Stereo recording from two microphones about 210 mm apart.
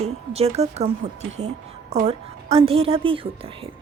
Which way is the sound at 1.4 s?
55° right (ahead or behind).